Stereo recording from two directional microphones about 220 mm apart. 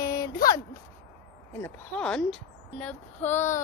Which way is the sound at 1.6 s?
5° left (ahead or behind).